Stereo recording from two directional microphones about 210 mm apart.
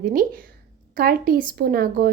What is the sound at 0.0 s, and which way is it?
A woman's voice, 40° right (ahead or behind).